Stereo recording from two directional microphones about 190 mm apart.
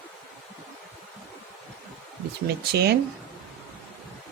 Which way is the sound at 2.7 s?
55° right (ahead or behind).